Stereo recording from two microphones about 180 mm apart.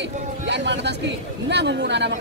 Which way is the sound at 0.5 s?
75° right (ahead or behind).